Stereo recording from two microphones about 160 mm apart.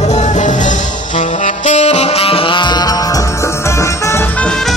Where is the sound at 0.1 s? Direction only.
45° left (ahead or behind).